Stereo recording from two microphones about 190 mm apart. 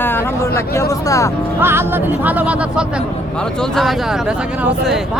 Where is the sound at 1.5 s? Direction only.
10° right (ahead or behind).